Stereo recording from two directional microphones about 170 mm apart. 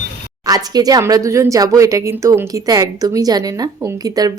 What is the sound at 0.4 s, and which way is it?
Speech, 20° right (ahead or behind).